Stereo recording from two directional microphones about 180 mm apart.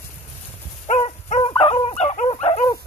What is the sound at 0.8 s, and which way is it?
Dog, 40° left (ahead or behind).